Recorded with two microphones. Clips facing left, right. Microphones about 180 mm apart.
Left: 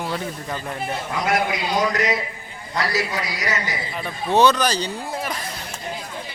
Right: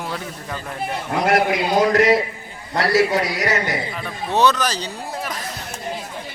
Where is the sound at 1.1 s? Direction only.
55° right (ahead or behind).